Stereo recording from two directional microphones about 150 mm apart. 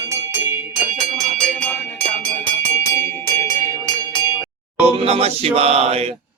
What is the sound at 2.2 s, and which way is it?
Music, 15° left (ahead or behind).